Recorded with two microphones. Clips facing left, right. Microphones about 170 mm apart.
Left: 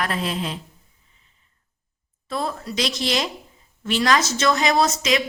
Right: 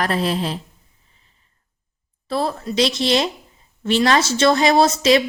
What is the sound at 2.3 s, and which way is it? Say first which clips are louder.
A woman's voice: right 5 dB; 30° right (ahead or behind).